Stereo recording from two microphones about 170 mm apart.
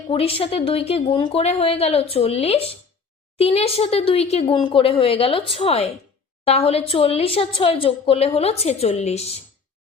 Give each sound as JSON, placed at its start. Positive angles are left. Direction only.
{"t": 0.1, "sound": "a woman's voice", "side_deg": 35}